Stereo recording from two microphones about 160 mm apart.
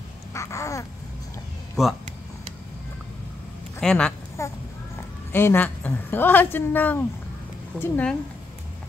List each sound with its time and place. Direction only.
0.3 s babbling: 20° left (ahead or behind)
3.8 s speech: 5° left (ahead or behind)
4.4 s a sound: 15° left (ahead or behind)
5.3 s a woman's voice: 15° left (ahead or behind)